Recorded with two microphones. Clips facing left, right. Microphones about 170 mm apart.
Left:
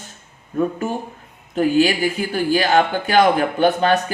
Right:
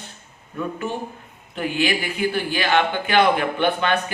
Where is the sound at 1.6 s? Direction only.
40° left (ahead or behind).